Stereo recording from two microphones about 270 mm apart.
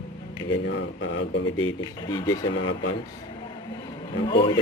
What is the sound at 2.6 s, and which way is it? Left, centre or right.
Speech, left.